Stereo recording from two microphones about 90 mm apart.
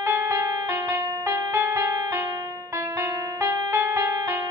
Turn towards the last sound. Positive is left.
turn(degrees=-35)  # may be behind; listen again after turning